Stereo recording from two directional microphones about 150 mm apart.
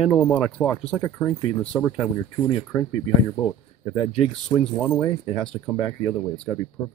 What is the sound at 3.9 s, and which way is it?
Speech, 45° left (ahead or behind).